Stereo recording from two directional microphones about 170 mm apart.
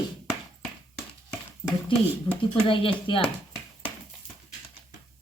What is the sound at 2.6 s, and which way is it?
Speech, 30° left (ahead or behind).